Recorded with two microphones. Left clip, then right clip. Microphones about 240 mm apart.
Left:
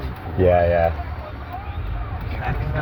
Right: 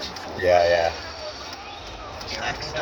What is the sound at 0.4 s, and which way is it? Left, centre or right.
Speech, centre.